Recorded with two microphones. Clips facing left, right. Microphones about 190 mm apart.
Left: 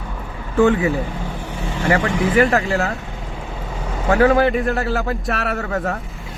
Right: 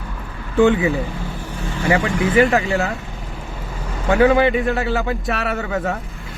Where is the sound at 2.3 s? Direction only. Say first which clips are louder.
Right 1 dB; centre (ahead or behind).